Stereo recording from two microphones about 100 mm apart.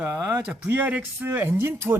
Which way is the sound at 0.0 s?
20° right (ahead or behind).